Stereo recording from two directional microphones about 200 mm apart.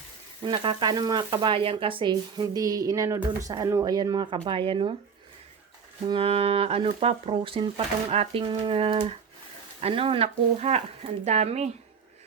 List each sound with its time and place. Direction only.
0.4 s frying: 25° right (ahead or behind)
6.1 s frying: 30° right (ahead or behind)
9.8 s speech: 25° right (ahead or behind)